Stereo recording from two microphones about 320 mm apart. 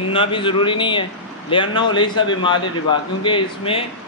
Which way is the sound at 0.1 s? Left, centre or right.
Centre.